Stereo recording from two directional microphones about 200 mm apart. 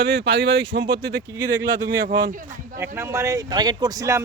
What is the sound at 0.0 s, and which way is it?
A woman's voice, 60° right (ahead or behind).